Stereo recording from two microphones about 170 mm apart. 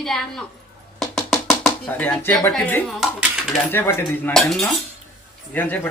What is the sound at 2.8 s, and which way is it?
Speech, centre (ahead or behind).